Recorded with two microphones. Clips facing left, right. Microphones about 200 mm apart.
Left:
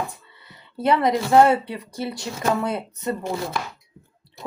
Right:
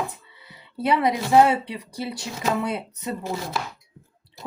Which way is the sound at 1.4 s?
55° left (ahead or behind).